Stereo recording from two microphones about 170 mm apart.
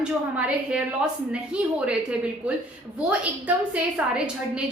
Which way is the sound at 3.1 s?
10° right (ahead or behind).